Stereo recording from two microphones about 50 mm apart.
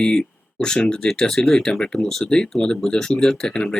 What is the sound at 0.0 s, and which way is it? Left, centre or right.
Speech, centre.